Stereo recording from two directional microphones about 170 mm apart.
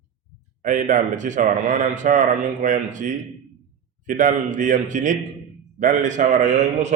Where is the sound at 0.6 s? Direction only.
50° right (ahead or behind).